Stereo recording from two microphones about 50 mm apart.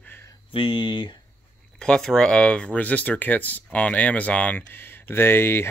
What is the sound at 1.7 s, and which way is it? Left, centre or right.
Speech, centre.